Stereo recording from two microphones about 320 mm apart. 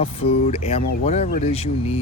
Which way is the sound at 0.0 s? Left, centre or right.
Centre.